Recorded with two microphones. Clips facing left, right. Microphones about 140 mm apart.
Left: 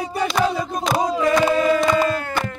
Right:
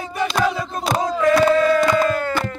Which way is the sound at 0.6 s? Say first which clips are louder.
Left 1 dB; 15° left (ahead or behind).